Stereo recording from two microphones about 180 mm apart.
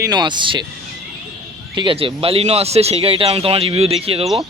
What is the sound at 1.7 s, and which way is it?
Speech, 25° right (ahead or behind).